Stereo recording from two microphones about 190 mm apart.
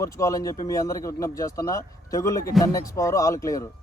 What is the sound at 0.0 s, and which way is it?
Speech, 15° left (ahead or behind).